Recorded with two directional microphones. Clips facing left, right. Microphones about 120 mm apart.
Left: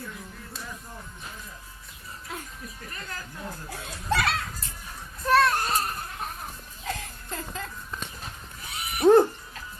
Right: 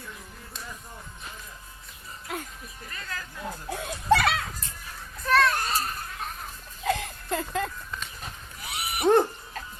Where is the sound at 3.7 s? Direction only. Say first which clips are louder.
Right 7 dB; 55° right (ahead or behind).